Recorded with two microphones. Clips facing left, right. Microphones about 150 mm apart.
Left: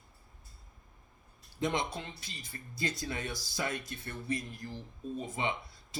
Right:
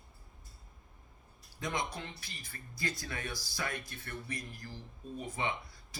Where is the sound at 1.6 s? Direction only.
25° left (ahead or behind).